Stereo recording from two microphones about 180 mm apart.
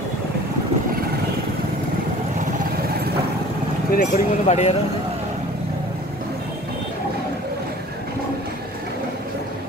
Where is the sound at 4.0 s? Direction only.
40° left (ahead or behind).